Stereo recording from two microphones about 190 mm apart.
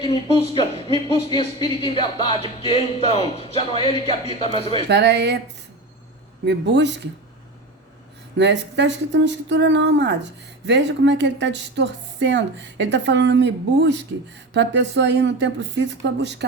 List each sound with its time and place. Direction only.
0.0 s speech: 30° left (ahead or behind)
4.9 s a man's voice: 65° right (ahead or behind)
6.4 s a man's voice: 65° right (ahead or behind)
8.4 s speech: 65° right (ahead or behind)